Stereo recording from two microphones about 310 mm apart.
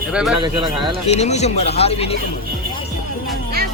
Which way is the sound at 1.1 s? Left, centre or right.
Left.